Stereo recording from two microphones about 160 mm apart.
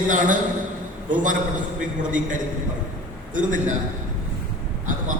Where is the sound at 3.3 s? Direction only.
55° right (ahead or behind).